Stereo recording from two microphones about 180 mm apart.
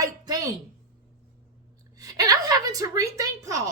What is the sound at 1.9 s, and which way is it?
Speech, 20° right (ahead or behind).